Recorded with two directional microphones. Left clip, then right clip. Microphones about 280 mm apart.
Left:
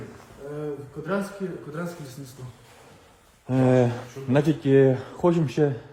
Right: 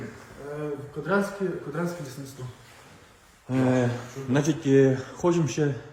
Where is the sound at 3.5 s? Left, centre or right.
Left.